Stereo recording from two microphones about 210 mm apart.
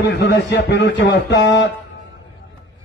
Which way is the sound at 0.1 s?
55° left (ahead or behind).